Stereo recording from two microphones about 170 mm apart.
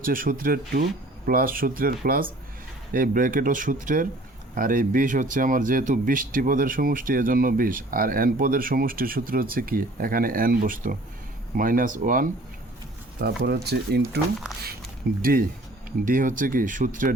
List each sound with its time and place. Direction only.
0.0 s speech: 55° right (ahead or behind)
13.1 s speech: 70° right (ahead or behind)
15.2 s speech: 60° right (ahead or behind)